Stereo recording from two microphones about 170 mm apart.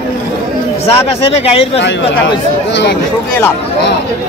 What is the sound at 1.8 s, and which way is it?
Speech, 90° left.